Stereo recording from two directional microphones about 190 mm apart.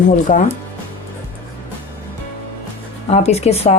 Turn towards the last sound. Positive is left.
turn(degrees=35)  # may be behind; listen again after turning